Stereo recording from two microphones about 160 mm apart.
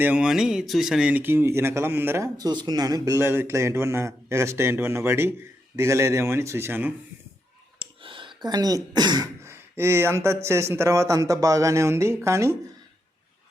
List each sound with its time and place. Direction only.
0.0 s speech: 10° right (ahead or behind)
7.8 s speech: 30° right (ahead or behind)